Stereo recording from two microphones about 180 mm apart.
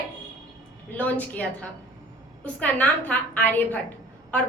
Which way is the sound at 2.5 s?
10° left (ahead or behind).